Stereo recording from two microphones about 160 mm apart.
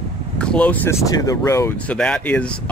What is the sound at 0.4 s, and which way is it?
Speech, 5° left (ahead or behind).